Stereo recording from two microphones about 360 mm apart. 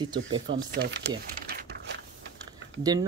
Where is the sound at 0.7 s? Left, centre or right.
Right.